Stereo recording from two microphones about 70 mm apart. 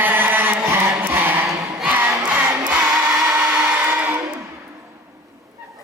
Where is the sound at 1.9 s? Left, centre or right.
Right.